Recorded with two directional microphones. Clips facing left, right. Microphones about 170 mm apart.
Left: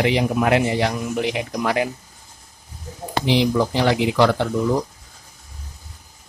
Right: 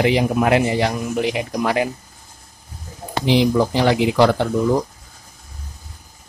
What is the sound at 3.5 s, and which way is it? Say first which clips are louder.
Speech: right 2 dB; 15° right (ahead or behind).